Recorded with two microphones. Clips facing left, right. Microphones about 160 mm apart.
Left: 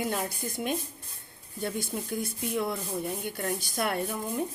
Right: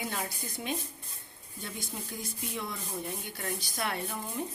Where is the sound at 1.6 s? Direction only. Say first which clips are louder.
Left 8 dB; 60° left (ahead or behind).